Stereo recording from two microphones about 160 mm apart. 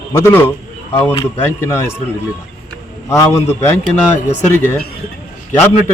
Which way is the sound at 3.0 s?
15° left (ahead or behind).